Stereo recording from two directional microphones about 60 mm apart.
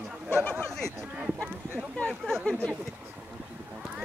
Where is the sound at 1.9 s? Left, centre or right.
Centre.